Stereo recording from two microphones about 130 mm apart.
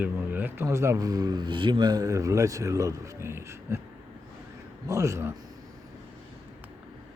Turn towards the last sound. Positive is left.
turn(degrees=-20)  # may be behind; listen again after turning